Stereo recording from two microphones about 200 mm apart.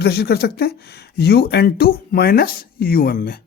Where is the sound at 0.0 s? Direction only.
55° left (ahead or behind).